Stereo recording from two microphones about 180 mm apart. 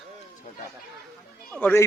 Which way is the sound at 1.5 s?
10° left (ahead or behind).